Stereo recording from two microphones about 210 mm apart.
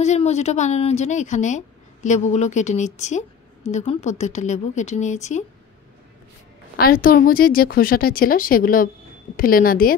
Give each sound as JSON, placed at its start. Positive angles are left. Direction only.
{"t": 0.0, "sound": "a woman's voice", "side_deg": 30}
{"t": 6.8, "sound": "a woman's voice", "side_deg": 45}